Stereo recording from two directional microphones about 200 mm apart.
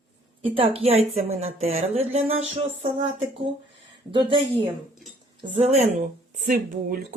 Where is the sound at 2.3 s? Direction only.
75° right (ahead or behind).